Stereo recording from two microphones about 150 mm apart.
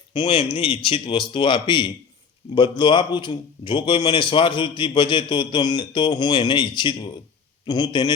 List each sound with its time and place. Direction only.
0.1 s a man's voice: 35° left (ahead or behind)